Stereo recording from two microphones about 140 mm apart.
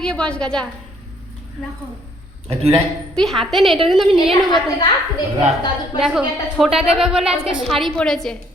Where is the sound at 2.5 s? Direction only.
45° right (ahead or behind).